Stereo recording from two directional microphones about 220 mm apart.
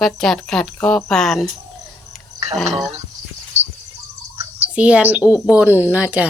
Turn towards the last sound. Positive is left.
turn(degrees=-5)  # may be behind; listen again after turning